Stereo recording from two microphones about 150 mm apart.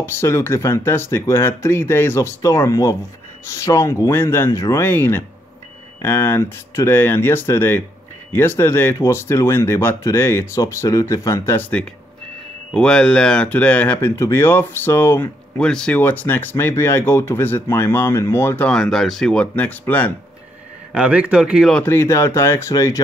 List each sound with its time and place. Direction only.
0.0 s speech: 15° left (ahead or behind)
12.7 s speech: 5° left (ahead or behind)
18.7 s speech: centre (ahead or behind)
20.9 s speech: 10° right (ahead or behind)
21.7 s speech: 15° left (ahead or behind)